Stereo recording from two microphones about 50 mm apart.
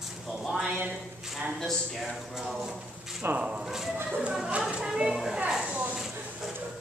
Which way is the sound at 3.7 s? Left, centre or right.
Centre.